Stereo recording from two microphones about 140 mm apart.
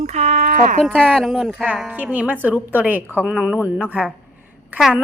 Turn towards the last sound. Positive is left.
turn(degrees=-5)  # may be behind; listen again after turning